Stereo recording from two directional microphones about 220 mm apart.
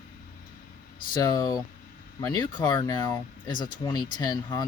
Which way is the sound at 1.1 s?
15° left (ahead or behind).